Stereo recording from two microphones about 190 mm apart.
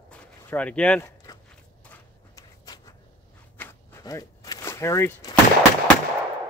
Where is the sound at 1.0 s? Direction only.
20° left (ahead or behind).